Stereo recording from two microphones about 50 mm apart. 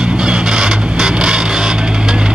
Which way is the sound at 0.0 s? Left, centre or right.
Centre.